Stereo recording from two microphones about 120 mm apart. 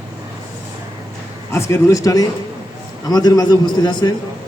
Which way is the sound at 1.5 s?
25° left (ahead or behind).